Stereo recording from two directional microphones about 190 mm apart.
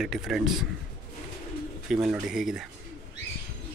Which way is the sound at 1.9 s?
5° right (ahead or behind).